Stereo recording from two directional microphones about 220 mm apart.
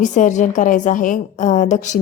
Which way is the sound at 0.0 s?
35° left (ahead or behind).